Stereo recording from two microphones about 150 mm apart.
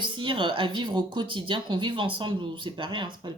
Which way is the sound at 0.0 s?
30° right (ahead or behind).